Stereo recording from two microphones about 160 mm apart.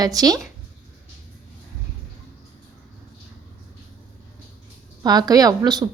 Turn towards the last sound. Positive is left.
turn(degrees=-25)  # may be behind; listen again after turning